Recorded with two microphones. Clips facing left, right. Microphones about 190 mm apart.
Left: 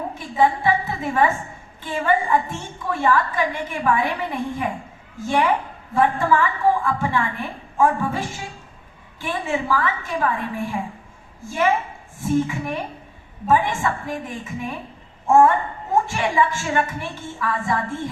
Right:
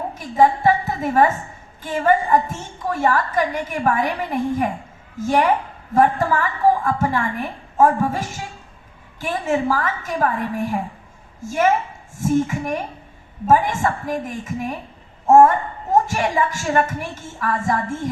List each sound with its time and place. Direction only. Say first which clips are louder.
0.1 s a woman's voice: right 3 dB; 40° right (ahead or behind)